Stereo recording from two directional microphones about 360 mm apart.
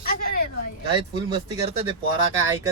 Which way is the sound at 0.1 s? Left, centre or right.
Left.